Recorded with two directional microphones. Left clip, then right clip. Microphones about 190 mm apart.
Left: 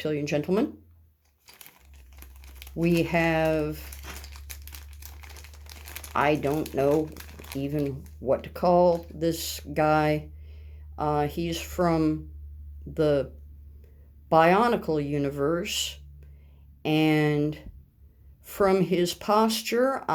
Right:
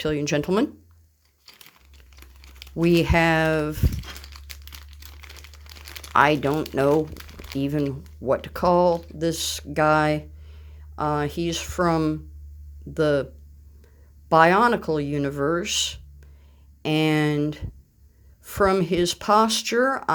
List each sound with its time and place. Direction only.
0.0 s speech: 35° right (ahead or behind)
1.5 s crumpling: 5° right (ahead or behind)
2.8 s speech: 40° right (ahead or behind)
3.9 s crumpling: 5° right (ahead or behind)
6.1 s speech: 35° right (ahead or behind)
6.9 s crumpling: 10° right (ahead or behind)
7.6 s speech: 35° right (ahead or behind)
14.3 s speech: 25° right (ahead or behind)